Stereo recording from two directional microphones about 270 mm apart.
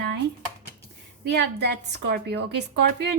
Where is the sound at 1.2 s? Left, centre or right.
Right.